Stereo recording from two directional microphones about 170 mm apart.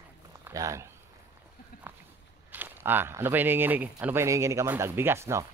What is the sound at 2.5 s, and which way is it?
Speech, 10° right (ahead or behind).